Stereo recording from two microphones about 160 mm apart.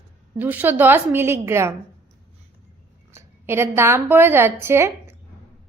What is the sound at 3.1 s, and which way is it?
A woman's voice, 15° right (ahead or behind).